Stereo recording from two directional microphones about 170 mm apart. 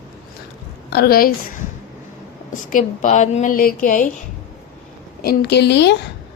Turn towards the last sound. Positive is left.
turn(degrees=90)